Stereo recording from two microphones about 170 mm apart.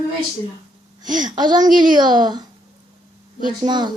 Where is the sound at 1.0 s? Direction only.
25° right (ahead or behind).